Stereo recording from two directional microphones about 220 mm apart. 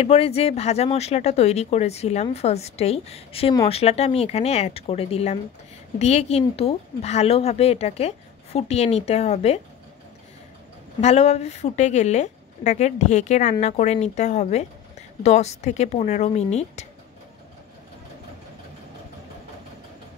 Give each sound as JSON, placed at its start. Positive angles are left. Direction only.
{"t": 0.0, "sound": "speech", "side_deg": 25}
{"t": 11.0, "sound": "speech", "side_deg": 30}